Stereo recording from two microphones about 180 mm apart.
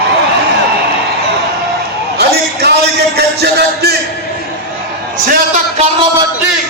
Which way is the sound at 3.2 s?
65° right (ahead or behind).